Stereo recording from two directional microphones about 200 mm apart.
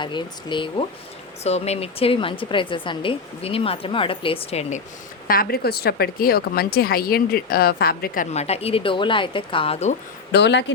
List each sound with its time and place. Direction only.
0.0 s a woman's voice: 25° left (ahead or behind)
5.3 s a woman's voice: 45° left (ahead or behind); by 9.9 s 30° left (ahead or behind)
10.3 s speech: 60° left (ahead or behind)